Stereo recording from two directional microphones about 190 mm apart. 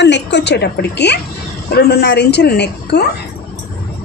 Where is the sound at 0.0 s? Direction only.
65° left (ahead or behind).